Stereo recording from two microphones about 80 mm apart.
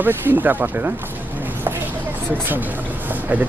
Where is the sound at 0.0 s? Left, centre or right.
Right.